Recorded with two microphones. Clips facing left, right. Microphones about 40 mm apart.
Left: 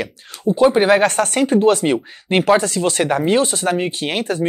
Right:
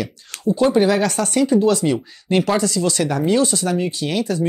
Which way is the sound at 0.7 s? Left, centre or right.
Left.